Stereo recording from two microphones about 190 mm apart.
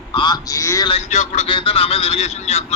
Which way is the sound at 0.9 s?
35° left (ahead or behind).